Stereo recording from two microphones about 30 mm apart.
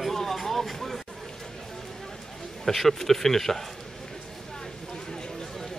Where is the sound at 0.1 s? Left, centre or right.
Centre.